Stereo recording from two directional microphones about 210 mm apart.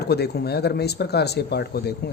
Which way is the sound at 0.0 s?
50° left (ahead or behind).